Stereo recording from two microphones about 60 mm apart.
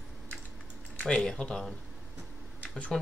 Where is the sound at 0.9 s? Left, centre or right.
Centre.